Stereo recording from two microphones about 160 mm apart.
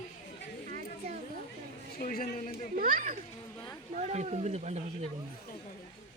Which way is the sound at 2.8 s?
60° right (ahead or behind).